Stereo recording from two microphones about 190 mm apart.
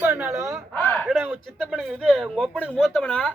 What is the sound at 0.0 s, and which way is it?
Wail, 10° right (ahead or behind).